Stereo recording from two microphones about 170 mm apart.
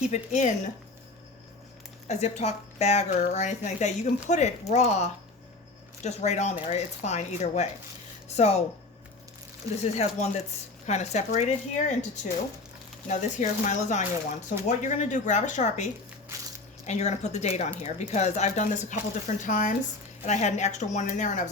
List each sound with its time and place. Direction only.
0.1 s a woman's voice: 45° left (ahead or behind)
2.0 s a woman's voice: 40° left (ahead or behind)
9.8 s a woman's voice: 40° left (ahead or behind)